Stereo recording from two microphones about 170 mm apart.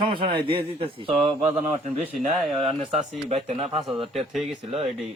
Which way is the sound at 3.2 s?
35° right (ahead or behind).